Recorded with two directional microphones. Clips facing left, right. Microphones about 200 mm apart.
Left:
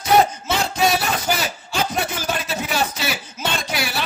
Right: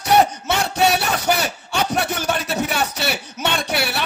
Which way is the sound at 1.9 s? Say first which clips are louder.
Right 3 dB; 65° right (ahead or behind).